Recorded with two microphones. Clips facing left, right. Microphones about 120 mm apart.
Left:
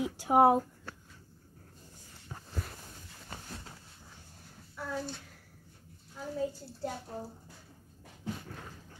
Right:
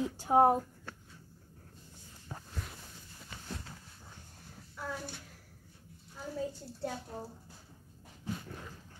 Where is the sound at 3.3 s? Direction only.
40° left (ahead or behind).